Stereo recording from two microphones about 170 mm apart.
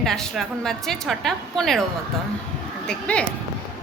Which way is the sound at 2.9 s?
5° left (ahead or behind).